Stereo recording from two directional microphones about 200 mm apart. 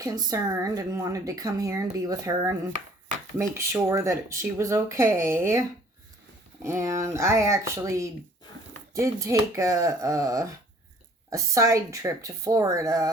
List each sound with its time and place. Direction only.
0.0 s speech: 15° right (ahead or behind)